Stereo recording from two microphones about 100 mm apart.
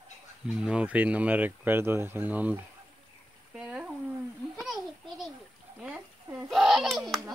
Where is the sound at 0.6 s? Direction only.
10° right (ahead or behind).